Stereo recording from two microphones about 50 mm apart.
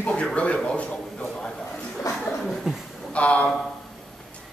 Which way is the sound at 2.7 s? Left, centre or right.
Centre.